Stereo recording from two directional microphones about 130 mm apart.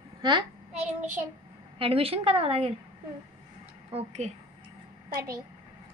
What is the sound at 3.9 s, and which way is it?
Speech, 50° right (ahead or behind).